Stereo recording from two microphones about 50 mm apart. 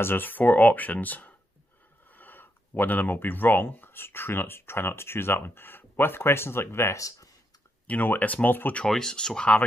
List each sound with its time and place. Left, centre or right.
0.0 s speech: left
7.8 s speech: left
8.8 s speech: centre